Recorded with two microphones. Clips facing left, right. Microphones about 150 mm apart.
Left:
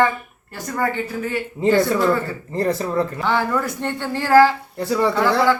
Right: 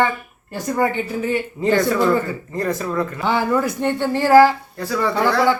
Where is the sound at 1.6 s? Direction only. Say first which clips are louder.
Left 4 dB; 20° left (ahead or behind).